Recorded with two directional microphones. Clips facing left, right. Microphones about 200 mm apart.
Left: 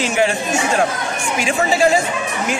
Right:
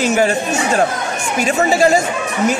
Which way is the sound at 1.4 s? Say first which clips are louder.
Right 3 dB; 40° right (ahead or behind).